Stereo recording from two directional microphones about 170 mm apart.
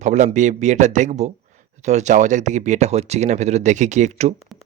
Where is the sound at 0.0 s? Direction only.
45° right (ahead or behind).